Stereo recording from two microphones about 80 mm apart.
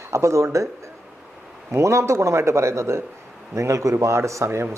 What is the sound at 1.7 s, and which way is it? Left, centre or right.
A man's voice, right.